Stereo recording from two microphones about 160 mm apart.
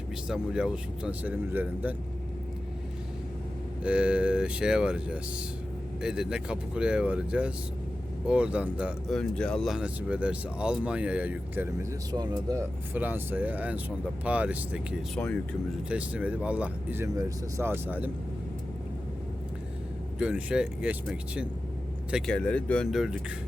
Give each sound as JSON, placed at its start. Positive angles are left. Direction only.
{"t": 0.3, "sound": "speech", "side_deg": -5}
{"t": 3.8, "sound": "speech", "side_deg": -5}
{"t": 9.1, "sound": "speech", "side_deg": 5}
{"t": 20.1, "sound": "speech", "side_deg": -5}
{"t": 22.1, "sound": "speech", "side_deg": 5}